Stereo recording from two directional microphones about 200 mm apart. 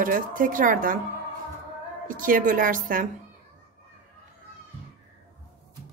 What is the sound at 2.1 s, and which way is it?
Speech, 45° right (ahead or behind).